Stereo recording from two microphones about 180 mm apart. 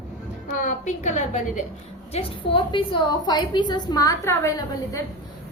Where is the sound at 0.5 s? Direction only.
45° left (ahead or behind).